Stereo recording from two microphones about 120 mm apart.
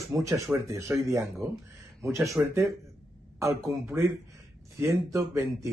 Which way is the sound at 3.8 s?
20° right (ahead or behind).